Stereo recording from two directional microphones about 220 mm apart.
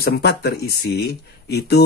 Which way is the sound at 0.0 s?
45° left (ahead or behind).